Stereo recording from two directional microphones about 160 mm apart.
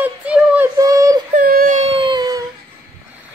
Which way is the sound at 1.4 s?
65° right (ahead or behind).